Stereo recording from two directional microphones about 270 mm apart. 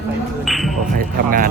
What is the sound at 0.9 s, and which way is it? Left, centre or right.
Speech, right.